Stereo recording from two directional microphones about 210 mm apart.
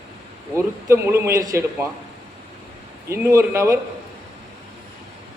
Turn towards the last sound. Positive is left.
turn(degrees=-15)  # may be behind; listen again after turning